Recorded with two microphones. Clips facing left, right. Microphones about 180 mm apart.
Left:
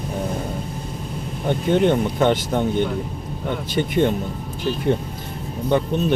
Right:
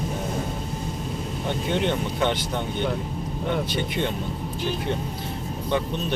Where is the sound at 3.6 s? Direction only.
50° left (ahead or behind).